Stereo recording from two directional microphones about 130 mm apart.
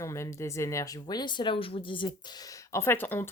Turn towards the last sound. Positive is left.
turn(degrees=15)  # may be behind; listen again after turning